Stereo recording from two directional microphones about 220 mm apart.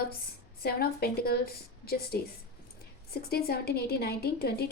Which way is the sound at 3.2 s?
45° left (ahead or behind).